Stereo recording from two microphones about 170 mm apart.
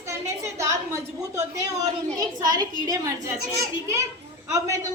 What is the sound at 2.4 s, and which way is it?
A woman's voice, 25° right (ahead or behind).